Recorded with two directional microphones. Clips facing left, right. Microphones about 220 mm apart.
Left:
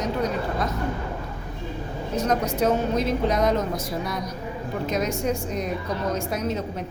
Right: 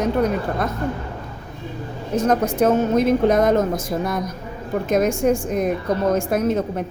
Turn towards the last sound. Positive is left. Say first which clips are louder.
# right 7 dB
turn(degrees=-50)  # may be behind; listen again after turning